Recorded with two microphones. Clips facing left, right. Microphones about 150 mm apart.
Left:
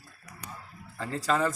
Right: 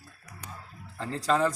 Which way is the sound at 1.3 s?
5° left (ahead or behind).